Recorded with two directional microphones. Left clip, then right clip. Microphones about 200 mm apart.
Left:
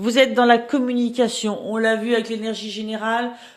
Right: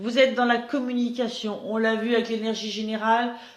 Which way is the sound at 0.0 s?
65° left (ahead or behind).